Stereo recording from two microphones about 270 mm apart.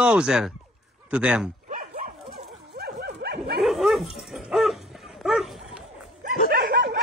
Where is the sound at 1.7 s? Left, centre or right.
Right.